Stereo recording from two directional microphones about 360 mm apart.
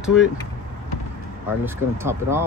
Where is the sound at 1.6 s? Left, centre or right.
Centre.